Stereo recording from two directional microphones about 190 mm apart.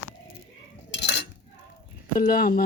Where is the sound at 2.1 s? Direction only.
45° left (ahead or behind).